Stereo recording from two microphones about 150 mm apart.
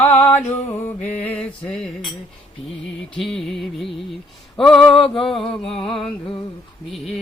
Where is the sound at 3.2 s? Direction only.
Centre (ahead or behind).